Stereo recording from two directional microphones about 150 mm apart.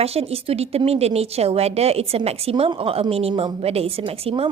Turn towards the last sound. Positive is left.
turn(degrees=-40)  # may be behind; listen again after turning